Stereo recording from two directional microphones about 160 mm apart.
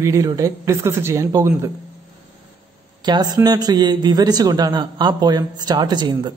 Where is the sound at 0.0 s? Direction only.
20° right (ahead or behind).